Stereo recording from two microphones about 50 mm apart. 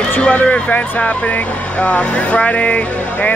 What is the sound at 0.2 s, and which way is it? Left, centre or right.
Speech, left.